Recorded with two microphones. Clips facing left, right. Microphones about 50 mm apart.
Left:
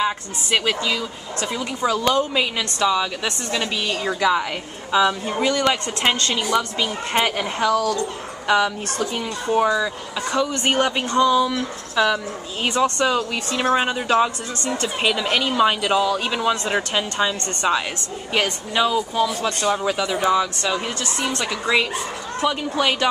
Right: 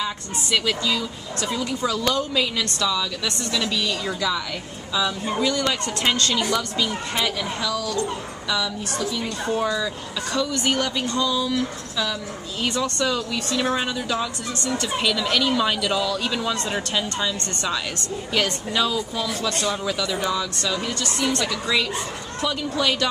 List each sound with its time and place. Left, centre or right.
0.0 s speech: left
9.5 s speech: left